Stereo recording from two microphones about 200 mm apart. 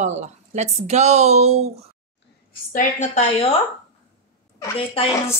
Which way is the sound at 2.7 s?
40° left (ahead or behind).